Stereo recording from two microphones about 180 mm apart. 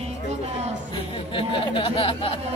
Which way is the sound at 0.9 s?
30° left (ahead or behind).